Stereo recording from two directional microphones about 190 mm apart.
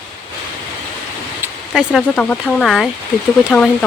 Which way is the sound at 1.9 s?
5° left (ahead or behind).